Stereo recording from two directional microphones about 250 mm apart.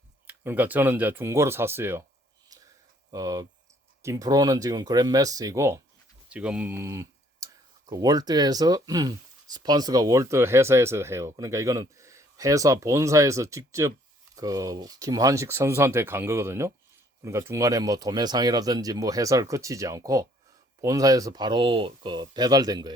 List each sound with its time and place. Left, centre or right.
0.3 s speech: centre
3.1 s speech: centre